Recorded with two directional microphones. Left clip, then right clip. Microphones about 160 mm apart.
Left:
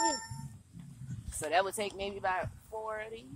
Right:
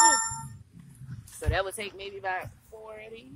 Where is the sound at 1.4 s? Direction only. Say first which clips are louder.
Even; 45° left (ahead or behind); by 3.2 s 65° left (ahead or behind).